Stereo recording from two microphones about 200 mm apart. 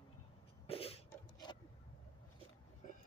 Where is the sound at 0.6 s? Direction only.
30° left (ahead or behind).